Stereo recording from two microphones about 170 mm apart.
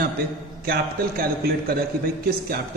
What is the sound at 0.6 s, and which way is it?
A man's voice, 60° right (ahead or behind).